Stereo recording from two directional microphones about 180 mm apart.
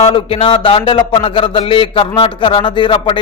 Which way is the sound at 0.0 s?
30° left (ahead or behind).